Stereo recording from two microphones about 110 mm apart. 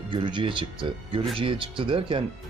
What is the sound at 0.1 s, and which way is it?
A man's voice, 45° right (ahead or behind).